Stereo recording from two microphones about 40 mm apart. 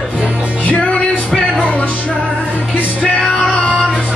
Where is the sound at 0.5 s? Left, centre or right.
Left.